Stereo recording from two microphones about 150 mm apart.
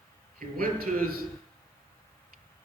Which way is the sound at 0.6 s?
70° right (ahead or behind).